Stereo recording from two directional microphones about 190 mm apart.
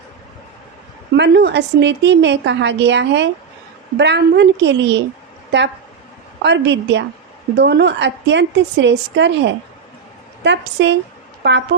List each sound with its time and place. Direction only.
1.1 s a woman's voice: 60° right (ahead or behind)